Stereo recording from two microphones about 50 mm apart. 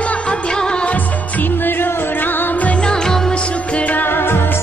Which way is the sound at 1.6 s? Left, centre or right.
Left.